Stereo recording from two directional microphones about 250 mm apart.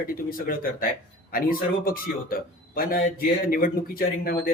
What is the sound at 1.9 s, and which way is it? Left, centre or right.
Speech, left.